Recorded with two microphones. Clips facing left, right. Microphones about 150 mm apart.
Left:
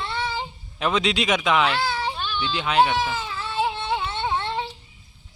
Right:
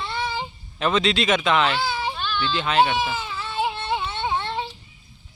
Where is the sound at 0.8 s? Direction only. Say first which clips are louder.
Right 1 dB; 10° left (ahead or behind).